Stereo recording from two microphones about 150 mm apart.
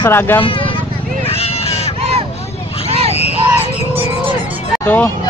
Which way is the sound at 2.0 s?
45° right (ahead or behind).